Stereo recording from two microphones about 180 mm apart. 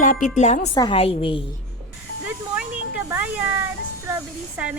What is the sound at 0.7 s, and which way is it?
Speech, 25° left (ahead or behind).